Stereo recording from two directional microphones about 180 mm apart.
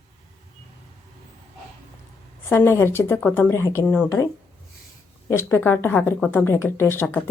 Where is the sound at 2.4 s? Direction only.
10° left (ahead or behind).